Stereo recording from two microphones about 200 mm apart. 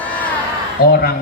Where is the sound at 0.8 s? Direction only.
50° left (ahead or behind).